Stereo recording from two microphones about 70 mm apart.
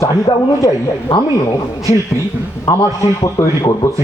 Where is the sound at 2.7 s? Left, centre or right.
Left.